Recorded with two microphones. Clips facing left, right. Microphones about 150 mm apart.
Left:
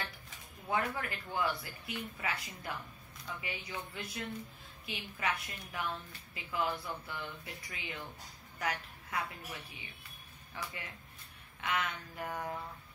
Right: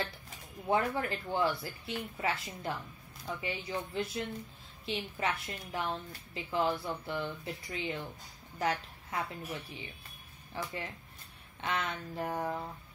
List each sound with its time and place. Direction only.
0.7 s a woman's voice: 30° right (ahead or behind)